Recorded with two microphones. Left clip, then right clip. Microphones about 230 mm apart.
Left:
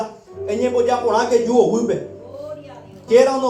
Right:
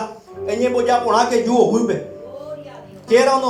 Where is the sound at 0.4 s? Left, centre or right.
Right.